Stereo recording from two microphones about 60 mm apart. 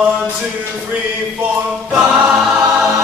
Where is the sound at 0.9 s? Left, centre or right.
Centre.